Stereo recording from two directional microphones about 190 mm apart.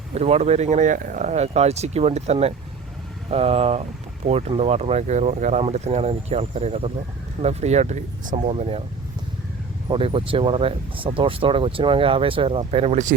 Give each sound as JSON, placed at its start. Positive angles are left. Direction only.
{"t": 0.1, "sound": "speech", "side_deg": -35}
{"t": 9.9, "sound": "speech", "side_deg": -30}